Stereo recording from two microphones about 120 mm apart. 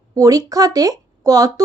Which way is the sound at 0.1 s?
30° right (ahead or behind).